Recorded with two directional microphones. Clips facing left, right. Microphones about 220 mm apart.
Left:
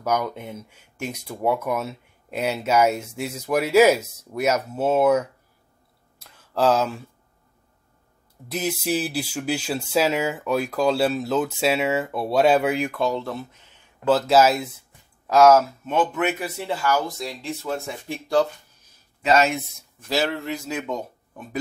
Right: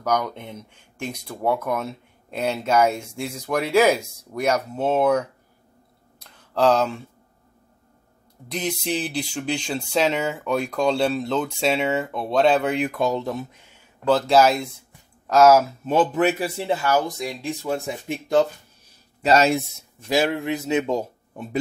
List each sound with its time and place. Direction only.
0.0 s speech: 5° left (ahead or behind)
6.5 s speech: 5° left (ahead or behind)
8.5 s speech: 5° left (ahead or behind)
12.9 s speech: 15° right (ahead or behind)
14.0 s speech: centre (ahead or behind)
15.8 s speech: 35° right (ahead or behind)
19.2 s speech: 35° right (ahead or behind)
20.1 s speech: 15° right (ahead or behind)